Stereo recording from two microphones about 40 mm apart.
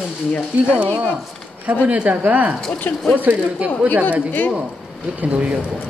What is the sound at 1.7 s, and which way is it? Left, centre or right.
Speech, right.